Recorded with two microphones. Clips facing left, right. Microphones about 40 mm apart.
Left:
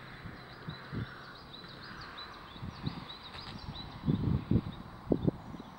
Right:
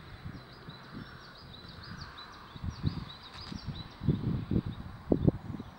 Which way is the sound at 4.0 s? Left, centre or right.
Centre.